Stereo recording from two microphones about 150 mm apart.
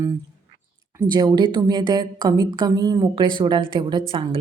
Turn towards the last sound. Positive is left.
turn(degrees=-35)  # may be behind; listen again after turning